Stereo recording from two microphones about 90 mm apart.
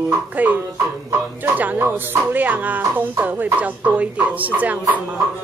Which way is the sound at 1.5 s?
20° right (ahead or behind).